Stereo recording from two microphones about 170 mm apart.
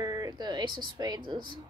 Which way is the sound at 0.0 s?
25° right (ahead or behind).